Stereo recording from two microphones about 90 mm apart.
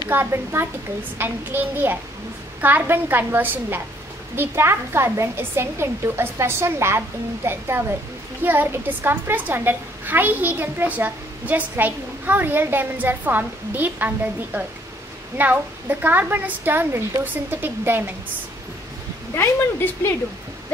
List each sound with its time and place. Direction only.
0.1 s a woman's voice: 25° right (ahead or behind)
19.3 s speech: 25° left (ahead or behind)